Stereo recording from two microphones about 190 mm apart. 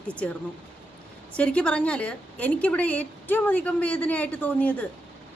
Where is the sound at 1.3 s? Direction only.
5° left (ahead or behind).